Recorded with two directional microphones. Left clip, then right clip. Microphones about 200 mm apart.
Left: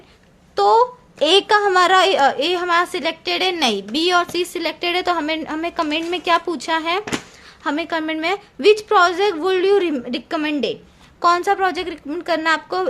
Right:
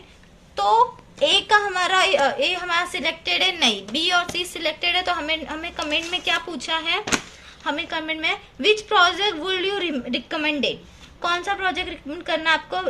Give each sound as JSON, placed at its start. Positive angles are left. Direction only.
{"t": 0.5, "sound": "a woman's voice", "side_deg": 60}